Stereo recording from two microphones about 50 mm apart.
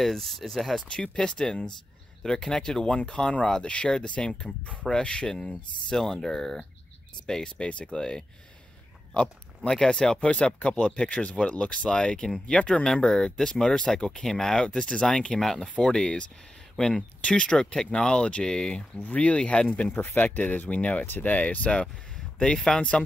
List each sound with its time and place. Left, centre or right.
0.0 s speech: centre
0.7 s speech: centre
9.7 s speech: centre
15.6 s speech: centre
19.9 s speech: left
22.1 s speech: centre